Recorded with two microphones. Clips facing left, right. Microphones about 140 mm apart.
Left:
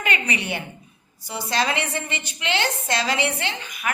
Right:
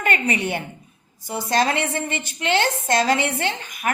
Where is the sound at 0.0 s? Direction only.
45° right (ahead or behind).